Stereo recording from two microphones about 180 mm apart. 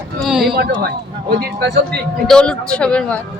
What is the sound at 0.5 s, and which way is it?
Speech, 60° right (ahead or behind).